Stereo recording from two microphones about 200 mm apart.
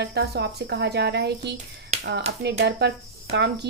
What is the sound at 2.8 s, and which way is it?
Speech, 55° right (ahead or behind).